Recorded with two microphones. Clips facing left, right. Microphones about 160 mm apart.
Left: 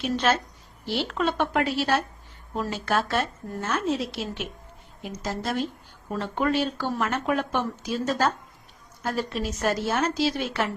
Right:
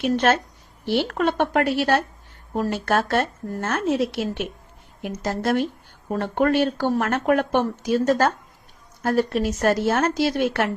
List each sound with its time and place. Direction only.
0.0 s speech: 55° right (ahead or behind)
9.0 s a sound: 60° right (ahead or behind)
9.3 s speech: 55° right (ahead or behind)